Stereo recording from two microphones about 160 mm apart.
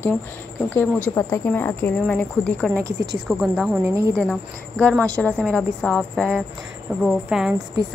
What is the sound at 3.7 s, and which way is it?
Speech, 20° right (ahead or behind).